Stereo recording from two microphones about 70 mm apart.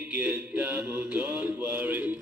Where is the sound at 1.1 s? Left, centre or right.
Centre.